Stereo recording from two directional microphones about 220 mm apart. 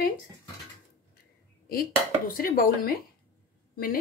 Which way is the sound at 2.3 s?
40° left (ahead or behind).